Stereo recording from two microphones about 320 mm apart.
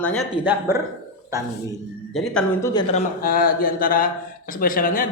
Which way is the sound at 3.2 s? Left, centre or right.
Left.